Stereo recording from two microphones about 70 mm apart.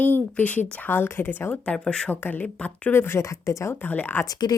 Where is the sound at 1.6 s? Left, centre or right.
Centre.